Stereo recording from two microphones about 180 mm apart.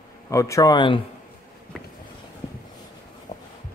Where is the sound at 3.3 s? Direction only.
35° left (ahead or behind).